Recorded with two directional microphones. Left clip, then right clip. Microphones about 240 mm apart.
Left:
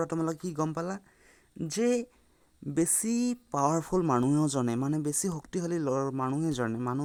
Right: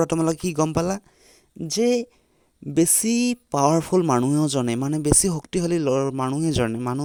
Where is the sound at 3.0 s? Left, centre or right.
Right.